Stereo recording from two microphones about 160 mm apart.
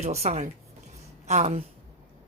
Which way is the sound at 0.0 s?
40° right (ahead or behind).